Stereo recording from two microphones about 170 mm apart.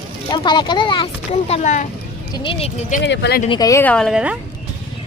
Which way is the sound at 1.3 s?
40° left (ahead or behind).